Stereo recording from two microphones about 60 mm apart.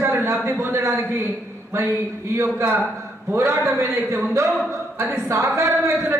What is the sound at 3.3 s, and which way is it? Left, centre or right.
Speech, right.